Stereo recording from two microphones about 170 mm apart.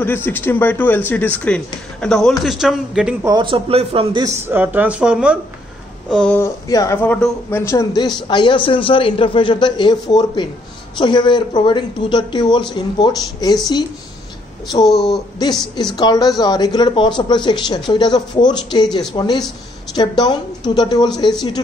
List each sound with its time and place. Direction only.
0.0 s a man's voice: 10° left (ahead or behind)
3.3 s a man's voice: 30° right (ahead or behind)
4.2 s speech: 10° right (ahead or behind)
6.0 s a man's voice: 5° left (ahead or behind)
6.4 s speech: 20° left (ahead or behind)
14.9 s a man's voice: centre (ahead or behind)
16.0 s speech: 20° left (ahead or behind)